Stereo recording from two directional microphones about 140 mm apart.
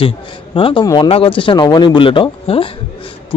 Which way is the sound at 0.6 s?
40° left (ahead or behind).